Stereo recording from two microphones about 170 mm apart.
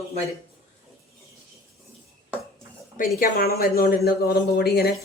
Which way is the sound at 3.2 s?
60° left (ahead or behind).